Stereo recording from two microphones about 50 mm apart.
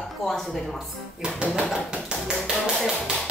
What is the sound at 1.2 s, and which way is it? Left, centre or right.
Speech, right.